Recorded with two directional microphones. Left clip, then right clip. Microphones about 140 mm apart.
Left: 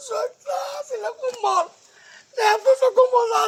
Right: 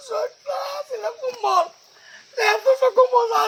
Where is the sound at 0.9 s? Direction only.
10° left (ahead or behind).